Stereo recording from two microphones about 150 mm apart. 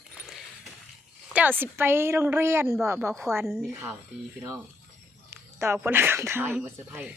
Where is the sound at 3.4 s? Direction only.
Centre (ahead or behind).